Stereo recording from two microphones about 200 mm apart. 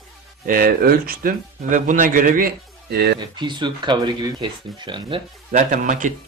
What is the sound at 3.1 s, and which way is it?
Speech, 20° right (ahead or behind).